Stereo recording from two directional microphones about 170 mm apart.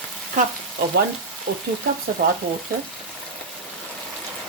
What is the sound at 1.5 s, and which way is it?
Speech, 60° right (ahead or behind).